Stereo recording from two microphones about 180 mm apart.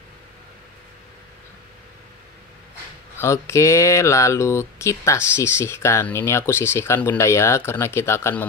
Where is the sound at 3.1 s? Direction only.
15° left (ahead or behind).